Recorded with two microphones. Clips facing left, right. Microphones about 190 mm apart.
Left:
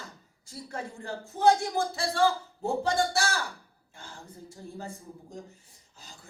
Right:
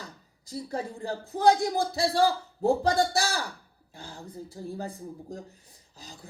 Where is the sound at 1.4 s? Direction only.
35° right (ahead or behind).